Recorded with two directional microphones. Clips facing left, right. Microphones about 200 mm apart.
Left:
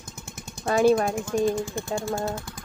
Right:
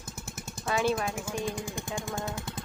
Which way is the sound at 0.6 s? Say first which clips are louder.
Left 8 dB; 45° left (ahead or behind).